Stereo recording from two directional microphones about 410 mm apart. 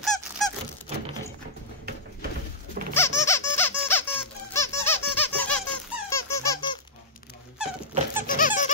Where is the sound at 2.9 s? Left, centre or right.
Centre.